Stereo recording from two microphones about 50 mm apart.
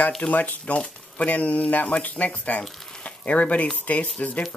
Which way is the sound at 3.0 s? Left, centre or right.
Left.